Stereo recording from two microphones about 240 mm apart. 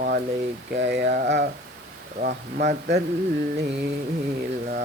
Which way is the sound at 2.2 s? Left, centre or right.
Right.